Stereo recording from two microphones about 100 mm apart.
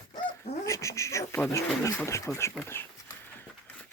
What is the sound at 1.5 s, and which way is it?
Speech, 30° left (ahead or behind).